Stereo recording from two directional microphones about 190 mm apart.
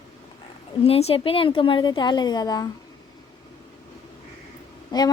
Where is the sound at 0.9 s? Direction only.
30° left (ahead or behind).